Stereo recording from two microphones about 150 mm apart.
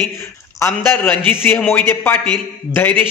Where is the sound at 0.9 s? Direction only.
10° left (ahead or behind).